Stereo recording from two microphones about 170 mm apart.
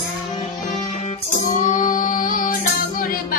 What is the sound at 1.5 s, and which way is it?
Female singing, 50° left (ahead or behind).